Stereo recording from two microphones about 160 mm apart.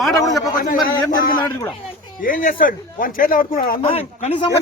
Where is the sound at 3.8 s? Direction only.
40° left (ahead or behind).